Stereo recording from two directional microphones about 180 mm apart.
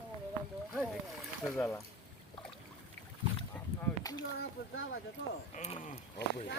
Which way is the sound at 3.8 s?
20° left (ahead or behind).